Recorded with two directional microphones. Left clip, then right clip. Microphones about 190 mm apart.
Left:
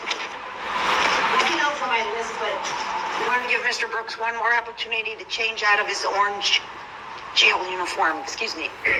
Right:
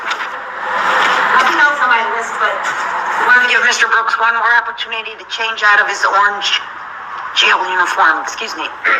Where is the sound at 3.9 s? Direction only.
45° right (ahead or behind).